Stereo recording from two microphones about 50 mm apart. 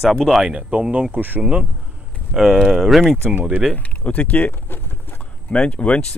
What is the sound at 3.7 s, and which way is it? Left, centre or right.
Speech, left.